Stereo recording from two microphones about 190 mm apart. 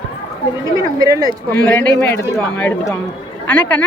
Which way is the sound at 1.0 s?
20° right (ahead or behind).